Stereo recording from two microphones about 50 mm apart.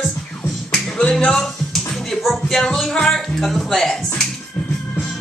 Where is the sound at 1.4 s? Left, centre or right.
Centre.